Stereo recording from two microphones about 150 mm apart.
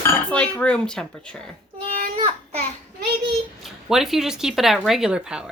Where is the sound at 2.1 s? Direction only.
40° right (ahead or behind).